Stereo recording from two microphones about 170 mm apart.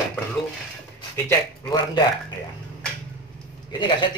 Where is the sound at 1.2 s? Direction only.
25° left (ahead or behind).